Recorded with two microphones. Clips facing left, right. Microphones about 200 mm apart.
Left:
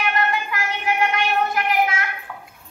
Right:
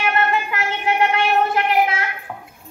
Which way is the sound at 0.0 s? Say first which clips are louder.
Right 3 dB; 25° right (ahead or behind).